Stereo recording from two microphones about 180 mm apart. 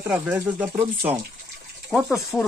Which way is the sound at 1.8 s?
Centre (ahead or behind).